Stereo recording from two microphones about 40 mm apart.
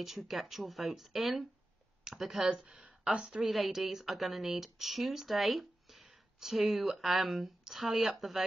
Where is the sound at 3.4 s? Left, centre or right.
Centre.